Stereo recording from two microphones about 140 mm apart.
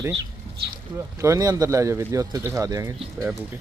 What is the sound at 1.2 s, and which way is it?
Speech, 20° right (ahead or behind).